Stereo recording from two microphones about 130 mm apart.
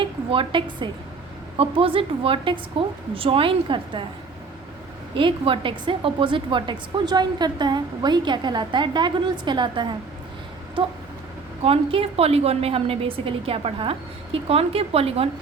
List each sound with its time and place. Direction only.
0.0 s a woman's voice: 40° right (ahead or behind)
5.1 s a woman's voice: 40° right (ahead or behind)
11.6 s a woman's voice: 45° right (ahead or behind)